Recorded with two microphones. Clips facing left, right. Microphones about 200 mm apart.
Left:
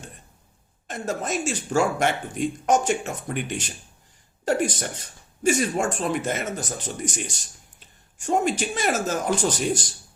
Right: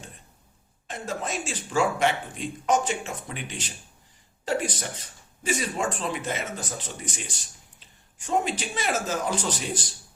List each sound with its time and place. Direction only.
0.9 s speech: 45° left (ahead or behind)